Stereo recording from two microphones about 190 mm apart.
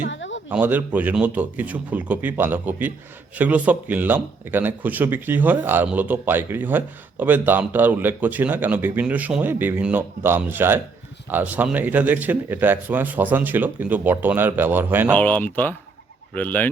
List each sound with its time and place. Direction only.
0.1 s a sound: 80° left
0.4 s speech: 10° right (ahead or behind)
15.1 s speech: 10° left (ahead or behind)